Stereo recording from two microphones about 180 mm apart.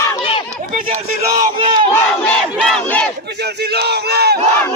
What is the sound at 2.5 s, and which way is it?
Battle cry, centre (ahead or behind).